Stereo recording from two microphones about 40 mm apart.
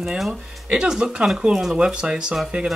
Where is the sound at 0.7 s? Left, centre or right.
Right.